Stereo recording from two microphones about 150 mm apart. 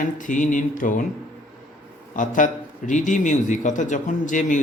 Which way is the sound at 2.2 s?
60° left (ahead or behind).